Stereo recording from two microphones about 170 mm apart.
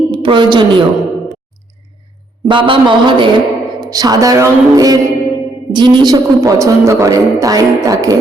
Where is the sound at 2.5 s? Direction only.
30° right (ahead or behind).